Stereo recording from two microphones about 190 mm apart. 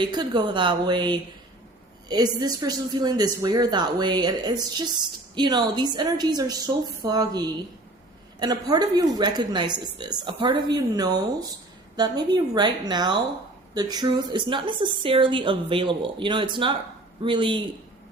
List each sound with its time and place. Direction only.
0.0 s speech: 25° right (ahead or behind)